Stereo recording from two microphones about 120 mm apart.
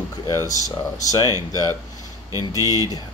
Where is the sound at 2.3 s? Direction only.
30° right (ahead or behind).